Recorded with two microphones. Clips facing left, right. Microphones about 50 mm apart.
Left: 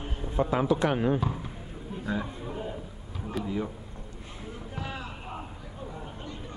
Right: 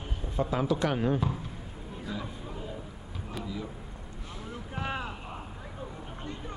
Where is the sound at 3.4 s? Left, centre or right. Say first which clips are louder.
Left 6 dB; left.